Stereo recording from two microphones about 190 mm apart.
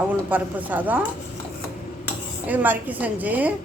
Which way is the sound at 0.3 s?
10° right (ahead or behind).